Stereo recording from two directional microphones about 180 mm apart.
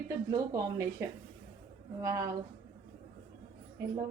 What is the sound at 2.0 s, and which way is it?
Speech, 15° right (ahead or behind).